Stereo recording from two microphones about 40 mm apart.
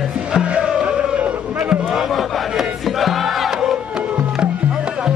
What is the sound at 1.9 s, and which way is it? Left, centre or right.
Crowd, centre.